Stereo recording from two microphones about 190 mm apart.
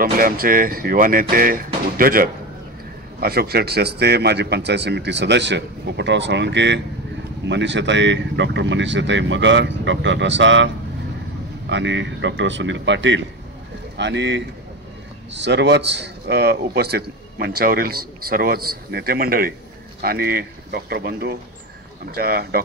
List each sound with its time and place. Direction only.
0.0 s a man's voice: 50° right (ahead or behind); by 10.7 s 75° right (ahead or behind)
11.7 s a man's voice: 75° right (ahead or behind); by 22.6 s 55° right (ahead or behind)